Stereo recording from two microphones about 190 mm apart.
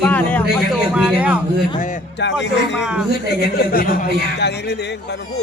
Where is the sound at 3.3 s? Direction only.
55° left (ahead or behind).